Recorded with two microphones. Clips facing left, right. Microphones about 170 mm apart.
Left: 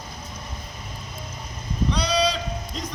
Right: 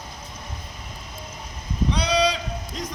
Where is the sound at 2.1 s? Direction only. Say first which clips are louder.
Right 2 dB; 15° right (ahead or behind).